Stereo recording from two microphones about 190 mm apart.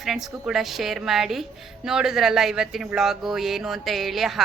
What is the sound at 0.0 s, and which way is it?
A woman's voice, centre (ahead or behind).